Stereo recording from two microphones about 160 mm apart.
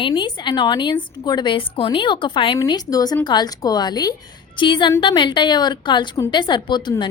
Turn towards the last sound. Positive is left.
turn(degrees=30)  # may be behind; listen again after turning